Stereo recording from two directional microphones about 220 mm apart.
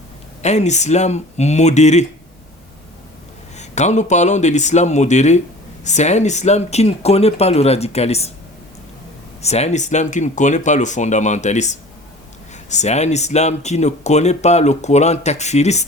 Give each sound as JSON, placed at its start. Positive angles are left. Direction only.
{"t": 0.4, "sound": "speech", "side_deg": 30}
{"t": 3.6, "sound": "speech", "side_deg": 30}
{"t": 9.4, "sound": "speech", "side_deg": 30}